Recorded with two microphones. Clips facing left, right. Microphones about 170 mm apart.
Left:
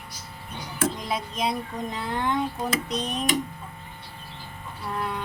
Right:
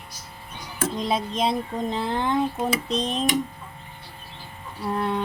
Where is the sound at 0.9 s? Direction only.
25° right (ahead or behind).